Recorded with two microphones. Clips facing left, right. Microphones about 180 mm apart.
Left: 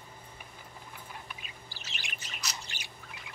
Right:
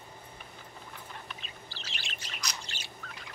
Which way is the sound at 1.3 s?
10° left (ahead or behind).